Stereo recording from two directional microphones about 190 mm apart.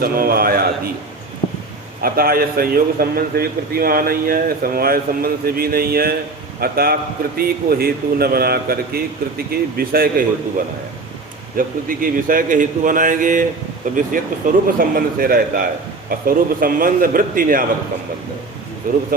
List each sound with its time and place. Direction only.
0.0 s a man's voice: 50° right (ahead or behind)
2.0 s a man's voice: 50° right (ahead or behind)
11.5 s a man's voice: 45° right (ahead or behind)
18.8 s a man's voice: 45° right (ahead or behind)